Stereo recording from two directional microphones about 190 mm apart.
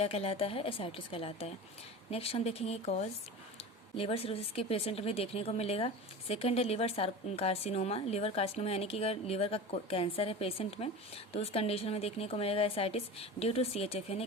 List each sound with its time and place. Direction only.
0.0 s a woman's voice: 30° left (ahead or behind)